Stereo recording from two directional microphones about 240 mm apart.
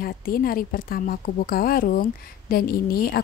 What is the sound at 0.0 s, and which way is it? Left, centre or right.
A woman's voice, left.